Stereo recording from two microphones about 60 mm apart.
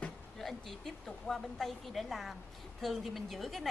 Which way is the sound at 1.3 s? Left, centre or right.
Centre.